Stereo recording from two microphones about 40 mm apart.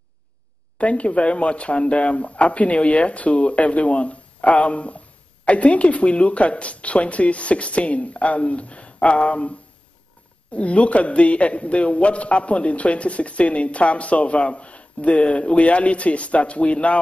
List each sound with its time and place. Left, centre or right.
0.7 s speech: left